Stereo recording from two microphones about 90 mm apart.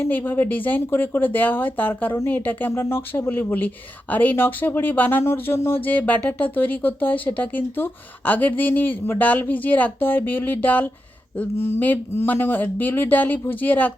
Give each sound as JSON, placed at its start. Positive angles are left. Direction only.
{"t": 0.0, "sound": "speech", "side_deg": 20}